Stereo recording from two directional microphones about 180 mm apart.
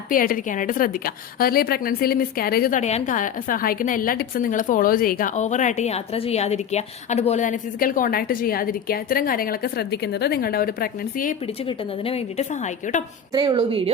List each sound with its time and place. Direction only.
0.1 s a woman's voice: 50° left (ahead or behind)
12.0 s a woman's voice: 35° left (ahead or behind)
13.3 s a woman's voice: 25° right (ahead or behind)